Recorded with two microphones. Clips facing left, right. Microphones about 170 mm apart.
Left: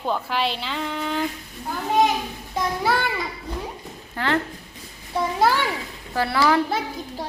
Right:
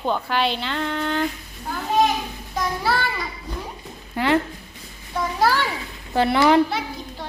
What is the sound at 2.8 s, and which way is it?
Child singing, 15° left (ahead or behind).